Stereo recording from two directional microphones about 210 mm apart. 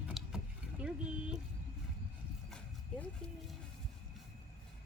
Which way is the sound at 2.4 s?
5° left (ahead or behind).